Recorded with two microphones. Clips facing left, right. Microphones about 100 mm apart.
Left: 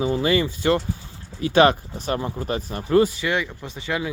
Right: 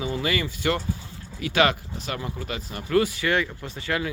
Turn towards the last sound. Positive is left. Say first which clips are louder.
# left 1 dB
turn(degrees=15)  # may be behind; listen again after turning